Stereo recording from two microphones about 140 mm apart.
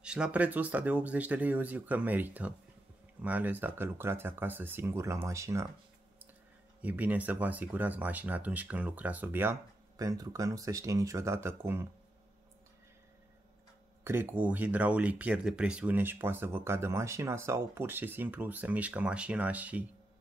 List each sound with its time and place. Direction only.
0.0 s speech: 5° right (ahead or behind)
6.8 s speech: 10° right (ahead or behind)
14.0 s speech: 15° right (ahead or behind)